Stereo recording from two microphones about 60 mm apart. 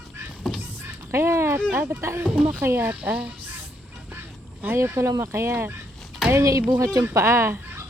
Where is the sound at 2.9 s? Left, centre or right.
Right.